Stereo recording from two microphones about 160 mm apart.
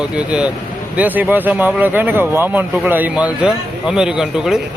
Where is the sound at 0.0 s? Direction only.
5° right (ahead or behind).